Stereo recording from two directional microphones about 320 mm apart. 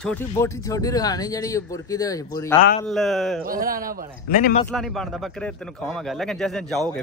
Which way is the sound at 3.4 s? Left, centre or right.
Right.